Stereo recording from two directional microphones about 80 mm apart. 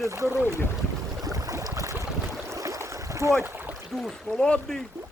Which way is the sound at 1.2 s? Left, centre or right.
Right.